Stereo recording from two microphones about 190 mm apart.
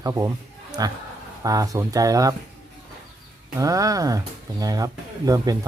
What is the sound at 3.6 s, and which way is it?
A man's voice, 15° right (ahead or behind).